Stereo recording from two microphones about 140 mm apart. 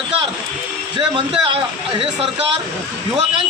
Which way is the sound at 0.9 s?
35° right (ahead or behind).